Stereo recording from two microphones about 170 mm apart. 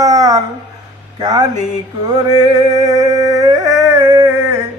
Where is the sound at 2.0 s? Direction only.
25° right (ahead or behind).